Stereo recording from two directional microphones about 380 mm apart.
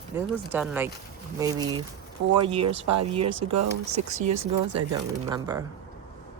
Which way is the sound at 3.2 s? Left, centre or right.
Right.